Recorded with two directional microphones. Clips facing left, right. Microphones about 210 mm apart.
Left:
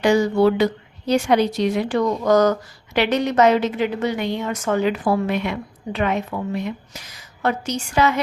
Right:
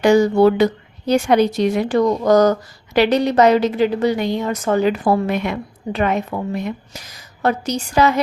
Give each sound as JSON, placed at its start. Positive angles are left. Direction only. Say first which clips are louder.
{"t": 0.0, "sound": "a woman's voice", "louder": "right 4 dB", "side_deg": -45}